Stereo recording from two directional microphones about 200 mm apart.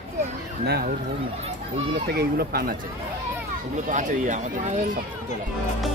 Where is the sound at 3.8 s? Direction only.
40° right (ahead or behind).